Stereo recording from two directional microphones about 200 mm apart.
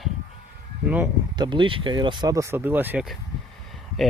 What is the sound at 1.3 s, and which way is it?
Speech, 20° right (ahead or behind).